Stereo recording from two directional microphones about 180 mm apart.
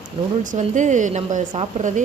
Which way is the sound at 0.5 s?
40° right (ahead or behind).